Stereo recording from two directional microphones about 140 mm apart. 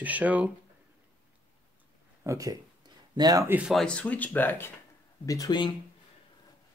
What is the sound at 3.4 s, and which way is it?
Speech, 10° right (ahead or behind).